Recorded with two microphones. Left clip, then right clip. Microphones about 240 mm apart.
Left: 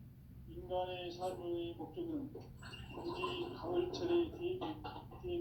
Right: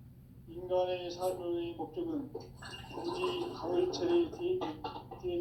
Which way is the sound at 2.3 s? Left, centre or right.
Right.